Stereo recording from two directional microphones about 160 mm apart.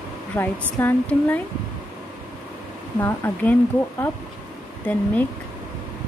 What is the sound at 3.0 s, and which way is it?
Speech, 10° left (ahead or behind).